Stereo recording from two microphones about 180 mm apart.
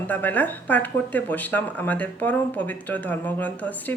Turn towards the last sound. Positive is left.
turn(degrees=10)  # may be behind; listen again after turning